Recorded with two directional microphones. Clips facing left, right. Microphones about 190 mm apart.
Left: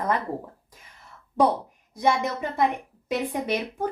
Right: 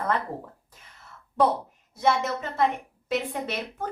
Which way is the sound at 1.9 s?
15° left (ahead or behind).